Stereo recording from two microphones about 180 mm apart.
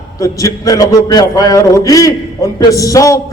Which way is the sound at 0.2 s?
20° left (ahead or behind).